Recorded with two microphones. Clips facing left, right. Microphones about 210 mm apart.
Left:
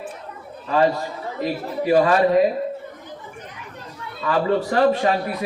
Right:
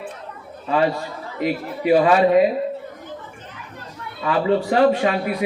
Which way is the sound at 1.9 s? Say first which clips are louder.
Right 2 dB; 15° right (ahead or behind).